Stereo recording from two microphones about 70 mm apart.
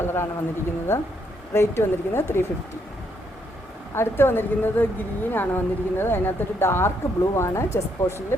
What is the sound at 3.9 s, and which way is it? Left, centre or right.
A woman's voice, left.